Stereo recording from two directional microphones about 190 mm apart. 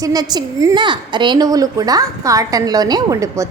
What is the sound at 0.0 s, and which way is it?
A woman's voice, 20° right (ahead or behind).